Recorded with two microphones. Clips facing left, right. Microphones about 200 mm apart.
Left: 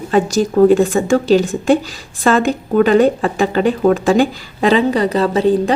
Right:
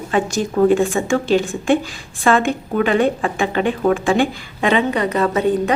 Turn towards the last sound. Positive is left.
turn(degrees=30)  # may be behind; listen again after turning